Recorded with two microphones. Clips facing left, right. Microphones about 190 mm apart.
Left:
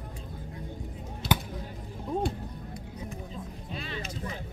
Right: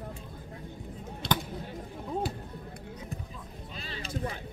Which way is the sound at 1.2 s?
5° left (ahead or behind).